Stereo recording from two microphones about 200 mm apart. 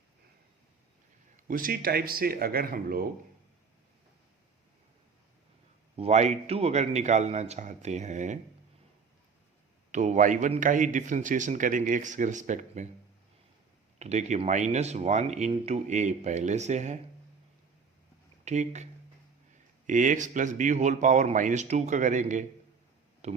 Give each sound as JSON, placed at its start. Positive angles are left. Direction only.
{"t": 1.5, "sound": "speech", "side_deg": -45}
{"t": 6.0, "sound": "a man's voice", "side_deg": -35}
{"t": 9.9, "sound": "a man's voice", "side_deg": -35}
{"t": 14.0, "sound": "a man's voice", "side_deg": -35}
{"t": 18.4, "sound": "a man's voice", "side_deg": -35}
{"t": 19.9, "sound": "a man's voice", "side_deg": -40}